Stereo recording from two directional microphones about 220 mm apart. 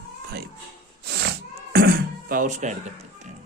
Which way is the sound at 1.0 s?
50° right (ahead or behind).